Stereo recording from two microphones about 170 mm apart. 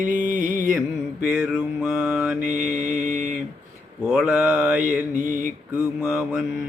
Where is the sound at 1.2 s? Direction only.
5° right (ahead or behind).